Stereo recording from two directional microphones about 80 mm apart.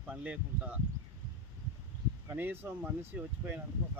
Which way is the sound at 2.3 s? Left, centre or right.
Right.